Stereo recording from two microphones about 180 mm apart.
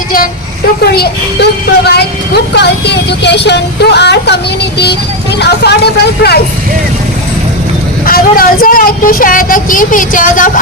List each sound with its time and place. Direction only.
0.8 s speech: 60° left (ahead or behind)
5.4 s speech: 65° left (ahead or behind)
8.0 s speech: 55° left (ahead or behind)